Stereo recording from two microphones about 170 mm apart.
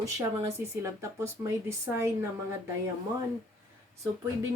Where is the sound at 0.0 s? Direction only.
20° right (ahead or behind).